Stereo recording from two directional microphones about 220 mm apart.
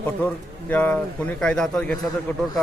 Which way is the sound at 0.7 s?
5° left (ahead or behind).